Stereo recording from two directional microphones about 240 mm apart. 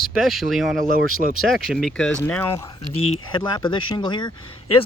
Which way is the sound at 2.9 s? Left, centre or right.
Left.